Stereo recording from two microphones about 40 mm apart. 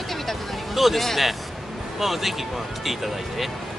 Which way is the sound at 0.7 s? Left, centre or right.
Centre.